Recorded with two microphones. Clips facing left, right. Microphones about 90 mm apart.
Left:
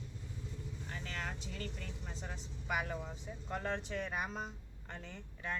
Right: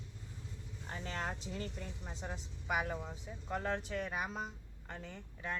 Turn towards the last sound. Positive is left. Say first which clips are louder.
# even
turn(degrees=-5)  # may be behind; listen again after turning